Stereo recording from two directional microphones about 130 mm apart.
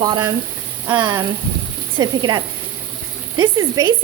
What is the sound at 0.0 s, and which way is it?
Speech, 30° right (ahead or behind).